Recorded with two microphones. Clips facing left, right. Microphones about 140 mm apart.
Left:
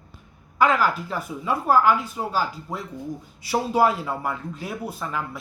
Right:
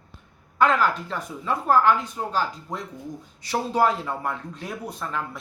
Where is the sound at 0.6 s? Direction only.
5° left (ahead or behind).